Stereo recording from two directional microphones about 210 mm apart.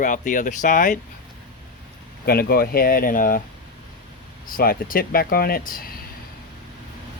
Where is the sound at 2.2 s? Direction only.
45° left (ahead or behind).